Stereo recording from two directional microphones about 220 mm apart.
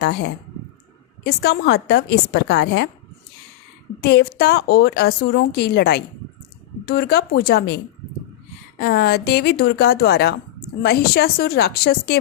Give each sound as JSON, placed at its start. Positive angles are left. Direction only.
{"t": 0.0, "sound": "a woman's voice", "side_deg": 45}
{"t": 4.0, "sound": "a woman's voice", "side_deg": 45}
{"t": 8.8, "sound": "a woman's voice", "side_deg": 45}